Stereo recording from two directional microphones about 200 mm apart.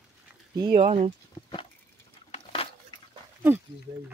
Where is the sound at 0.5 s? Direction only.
20° right (ahead or behind).